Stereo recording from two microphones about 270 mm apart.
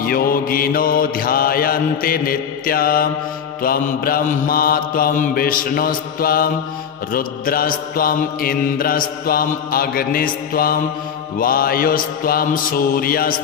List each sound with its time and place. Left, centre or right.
0.0 s mantra: left